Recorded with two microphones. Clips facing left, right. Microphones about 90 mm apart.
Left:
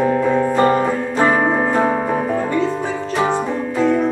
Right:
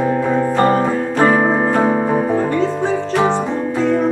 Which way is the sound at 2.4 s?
35° right (ahead or behind).